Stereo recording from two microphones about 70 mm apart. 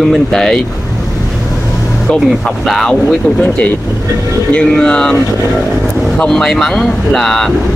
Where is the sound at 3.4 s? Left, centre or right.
Centre.